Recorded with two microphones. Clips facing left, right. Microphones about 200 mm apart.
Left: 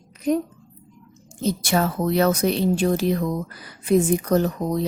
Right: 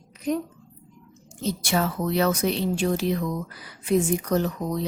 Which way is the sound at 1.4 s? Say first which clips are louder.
Left 3 dB; 45° left (ahead or behind).